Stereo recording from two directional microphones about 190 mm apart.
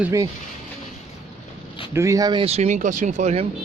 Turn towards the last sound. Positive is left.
turn(degrees=-35)  # may be behind; listen again after turning